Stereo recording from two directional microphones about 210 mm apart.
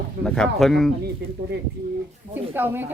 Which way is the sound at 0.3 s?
5° left (ahead or behind).